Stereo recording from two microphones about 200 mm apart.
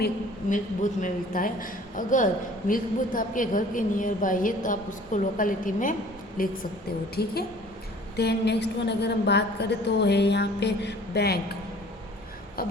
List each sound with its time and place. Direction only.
0.5 s a man's voice: 40° left (ahead or behind)